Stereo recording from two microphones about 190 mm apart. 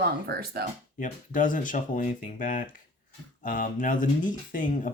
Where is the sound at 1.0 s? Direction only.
45° left (ahead or behind).